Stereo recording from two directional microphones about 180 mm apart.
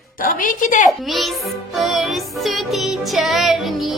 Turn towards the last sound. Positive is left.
turn(degrees=0)  # may be behind; listen again after turning